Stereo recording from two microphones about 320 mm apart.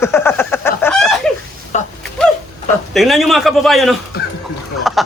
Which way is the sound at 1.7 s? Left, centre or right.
Left.